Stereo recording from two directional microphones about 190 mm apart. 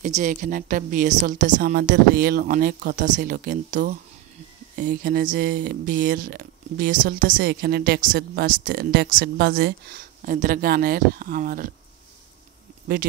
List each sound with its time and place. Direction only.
0.0 s speech: 40° right (ahead or behind)